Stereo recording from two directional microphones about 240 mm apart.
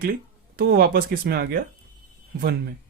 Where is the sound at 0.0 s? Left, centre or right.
Right.